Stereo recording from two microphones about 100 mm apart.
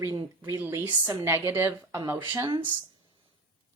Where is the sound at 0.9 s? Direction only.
45° right (ahead or behind).